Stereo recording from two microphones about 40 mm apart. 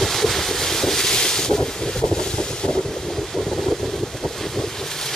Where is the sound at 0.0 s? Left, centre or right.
Centre.